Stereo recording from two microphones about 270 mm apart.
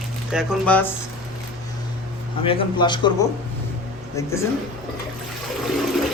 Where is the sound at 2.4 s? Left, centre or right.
Centre.